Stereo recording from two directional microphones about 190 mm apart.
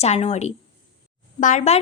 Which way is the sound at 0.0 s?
30° left (ahead or behind).